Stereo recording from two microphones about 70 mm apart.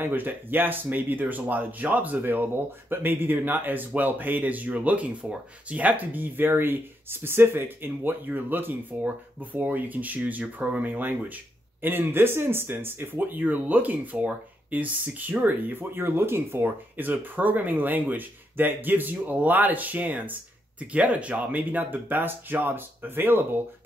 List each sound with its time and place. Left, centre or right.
0.0 s speech: right